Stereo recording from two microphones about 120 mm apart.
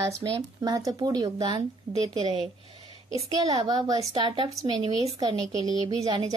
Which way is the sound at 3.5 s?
35° right (ahead or behind).